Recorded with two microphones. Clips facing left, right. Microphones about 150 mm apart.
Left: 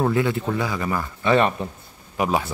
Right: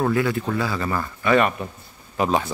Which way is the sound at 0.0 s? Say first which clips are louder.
Even; 20° left (ahead or behind).